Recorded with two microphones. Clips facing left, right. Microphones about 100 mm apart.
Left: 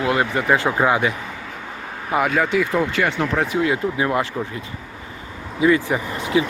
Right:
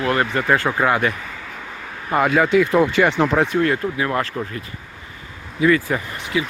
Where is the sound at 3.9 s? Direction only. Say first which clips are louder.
Left 1 dB; 20° left (ahead or behind).